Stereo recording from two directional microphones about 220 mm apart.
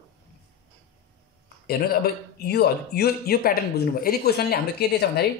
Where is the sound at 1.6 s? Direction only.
45° left (ahead or behind).